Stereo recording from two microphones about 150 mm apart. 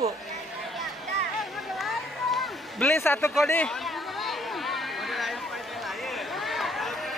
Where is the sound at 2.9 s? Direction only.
15° left (ahead or behind).